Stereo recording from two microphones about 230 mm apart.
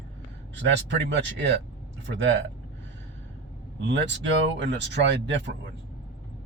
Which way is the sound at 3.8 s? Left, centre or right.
Right.